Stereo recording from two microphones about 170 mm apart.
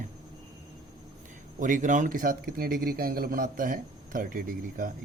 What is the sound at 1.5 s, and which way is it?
Speech, 50° right (ahead or behind).